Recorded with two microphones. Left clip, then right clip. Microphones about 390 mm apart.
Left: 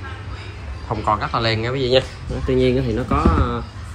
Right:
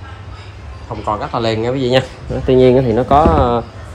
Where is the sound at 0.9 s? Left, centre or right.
Centre.